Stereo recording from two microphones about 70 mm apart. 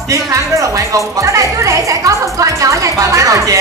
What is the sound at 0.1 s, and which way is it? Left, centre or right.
A woman's voice, right.